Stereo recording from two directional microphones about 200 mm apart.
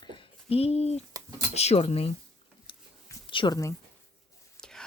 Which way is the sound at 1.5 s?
30° left (ahead or behind).